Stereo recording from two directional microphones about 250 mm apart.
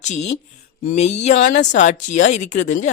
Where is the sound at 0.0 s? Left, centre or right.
Left.